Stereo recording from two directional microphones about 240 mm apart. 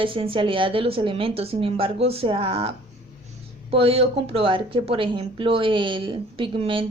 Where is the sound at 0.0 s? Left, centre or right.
Right.